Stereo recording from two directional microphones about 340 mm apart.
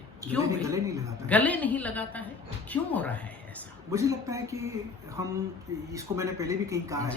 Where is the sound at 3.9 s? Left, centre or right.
Centre.